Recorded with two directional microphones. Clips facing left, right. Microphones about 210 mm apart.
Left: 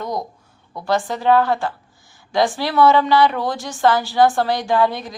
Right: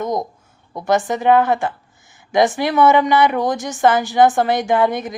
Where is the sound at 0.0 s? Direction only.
20° right (ahead or behind).